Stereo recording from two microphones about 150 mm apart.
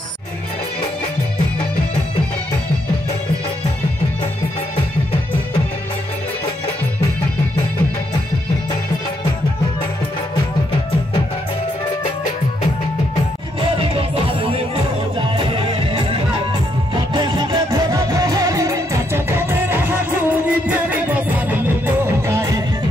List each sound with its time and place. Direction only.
15.1 s music: 35° right (ahead or behind)
17.1 s music: 30° right (ahead or behind)